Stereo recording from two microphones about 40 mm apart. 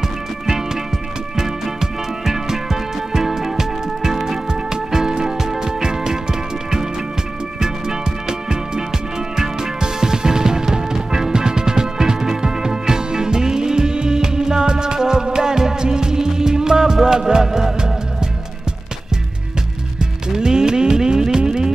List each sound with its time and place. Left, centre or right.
1.3 s music: centre
20.0 s music: centre